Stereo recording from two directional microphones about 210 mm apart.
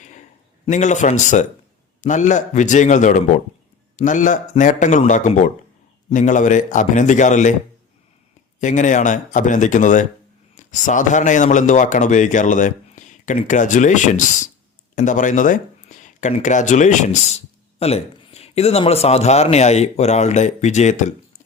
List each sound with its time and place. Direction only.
0.6 s speech: 35° left (ahead or behind)
8.6 s speech: 35° left (ahead or behind)